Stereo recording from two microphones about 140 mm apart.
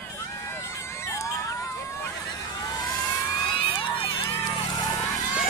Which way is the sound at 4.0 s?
40° left (ahead or behind).